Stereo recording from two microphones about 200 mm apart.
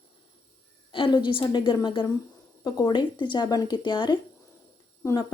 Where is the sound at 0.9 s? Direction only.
25° left (ahead or behind).